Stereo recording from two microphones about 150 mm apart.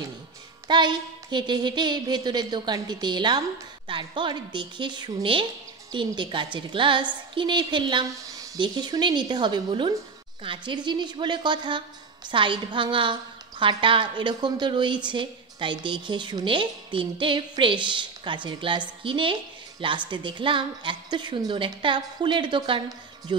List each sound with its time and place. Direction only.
0.7 s speech: 30° right (ahead or behind)